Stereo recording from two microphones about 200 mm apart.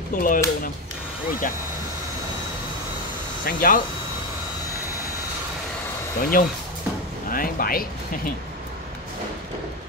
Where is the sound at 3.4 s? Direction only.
45° left (ahead or behind).